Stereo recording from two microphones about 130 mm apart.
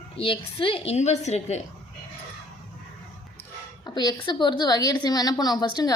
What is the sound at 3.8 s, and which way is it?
A woman's voice, 35° left (ahead or behind).